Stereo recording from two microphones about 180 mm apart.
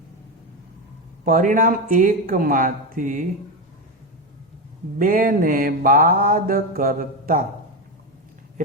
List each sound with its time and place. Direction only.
1.2 s mantra: 45° right (ahead or behind)
4.9 s mantra: 50° right (ahead or behind)